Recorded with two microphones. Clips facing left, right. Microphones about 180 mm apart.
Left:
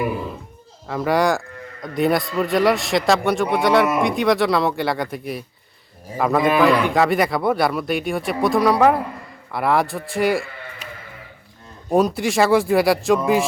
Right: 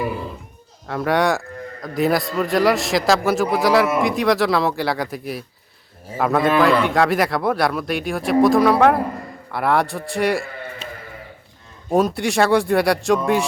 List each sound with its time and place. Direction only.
0.9 s speech: centre (ahead or behind)
10.8 s a sound: 25° right (ahead or behind)
11.9 s speech: centre (ahead or behind)